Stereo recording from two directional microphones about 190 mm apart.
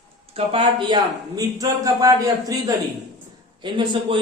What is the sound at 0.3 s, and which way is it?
A man's voice, 30° right (ahead or behind).